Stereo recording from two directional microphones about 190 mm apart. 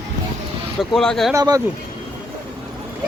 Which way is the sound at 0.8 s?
Centre (ahead or behind).